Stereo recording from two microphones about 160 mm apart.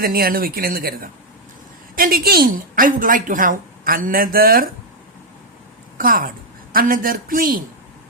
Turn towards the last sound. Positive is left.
turn(degrees=-60)  # may be behind; listen again after turning